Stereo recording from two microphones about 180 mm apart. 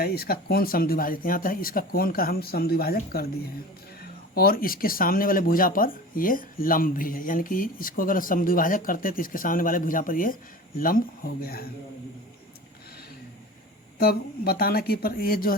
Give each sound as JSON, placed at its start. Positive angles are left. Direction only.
{"t": 0.0, "sound": "speech", "side_deg": 60}
{"t": 14.0, "sound": "speech", "side_deg": 55}